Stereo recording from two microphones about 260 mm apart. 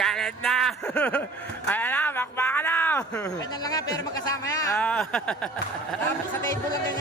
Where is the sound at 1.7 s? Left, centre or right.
Centre.